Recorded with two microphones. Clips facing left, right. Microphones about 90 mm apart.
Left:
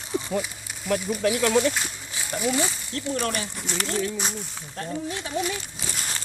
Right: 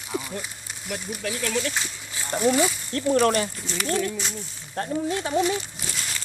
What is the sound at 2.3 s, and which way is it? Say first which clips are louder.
Speech: right 4 dB; 45° right (ahead or behind).